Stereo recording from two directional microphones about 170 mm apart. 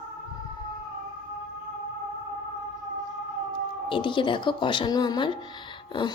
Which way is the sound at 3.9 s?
30° left (ahead or behind).